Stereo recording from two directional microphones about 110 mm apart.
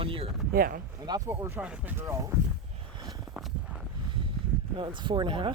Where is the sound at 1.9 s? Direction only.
25° right (ahead or behind).